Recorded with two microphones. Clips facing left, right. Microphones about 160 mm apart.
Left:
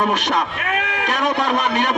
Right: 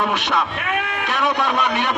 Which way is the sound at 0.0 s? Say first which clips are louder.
Left 2 dB; 45° left (ahead or behind).